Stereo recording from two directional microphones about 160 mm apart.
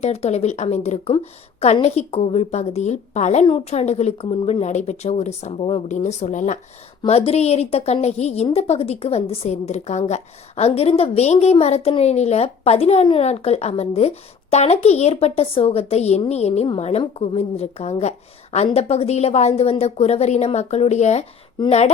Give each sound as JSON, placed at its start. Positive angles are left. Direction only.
{"t": 0.0, "sound": "a woman's voice", "side_deg": 40}
{"t": 5.9, "sound": "a woman's voice", "side_deg": 45}